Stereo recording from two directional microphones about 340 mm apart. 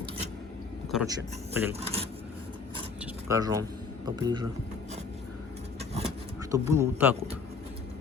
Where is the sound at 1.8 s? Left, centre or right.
Centre.